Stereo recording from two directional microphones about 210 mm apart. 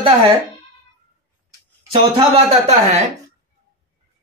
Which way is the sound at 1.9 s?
30° right (ahead or behind).